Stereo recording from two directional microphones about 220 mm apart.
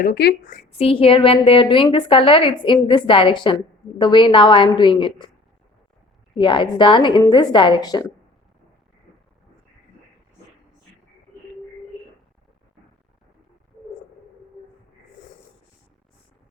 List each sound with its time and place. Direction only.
0.0 s speech: 45° left (ahead or behind)
0.7 s a woman's voice: 25° left (ahead or behind)
6.3 s a woman's voice: 20° left (ahead or behind)